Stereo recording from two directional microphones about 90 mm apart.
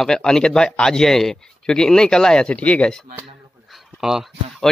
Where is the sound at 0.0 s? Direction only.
5° left (ahead or behind).